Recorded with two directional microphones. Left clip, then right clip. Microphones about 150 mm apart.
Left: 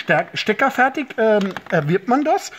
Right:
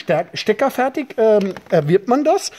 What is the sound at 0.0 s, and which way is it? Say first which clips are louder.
Speech: even; 30° right (ahead or behind).